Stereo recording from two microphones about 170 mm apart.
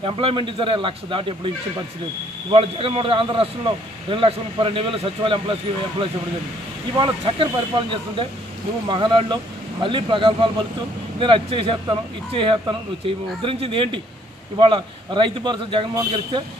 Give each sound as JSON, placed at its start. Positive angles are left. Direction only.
{"t": 0.0, "sound": "speech", "side_deg": -30}
{"t": 2.5, "sound": "speech", "side_deg": -30}
{"t": 8.8, "sound": "speech", "side_deg": -25}